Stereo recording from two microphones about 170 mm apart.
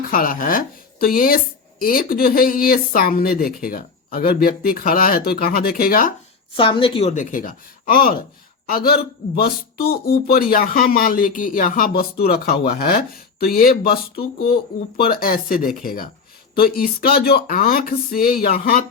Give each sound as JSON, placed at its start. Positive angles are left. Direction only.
{"t": 0.1, "sound": "speech", "side_deg": 55}
{"t": 6.6, "sound": "a woman's voice", "side_deg": 30}
{"t": 7.1, "sound": "speech", "side_deg": 50}